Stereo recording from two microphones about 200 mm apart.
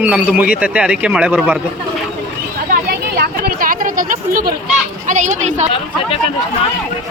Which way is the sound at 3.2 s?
45° right (ahead or behind).